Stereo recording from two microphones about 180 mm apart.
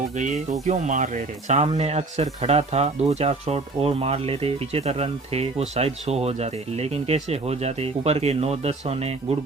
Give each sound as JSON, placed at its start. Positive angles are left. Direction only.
{"t": 0.6, "sound": "speech", "side_deg": -40}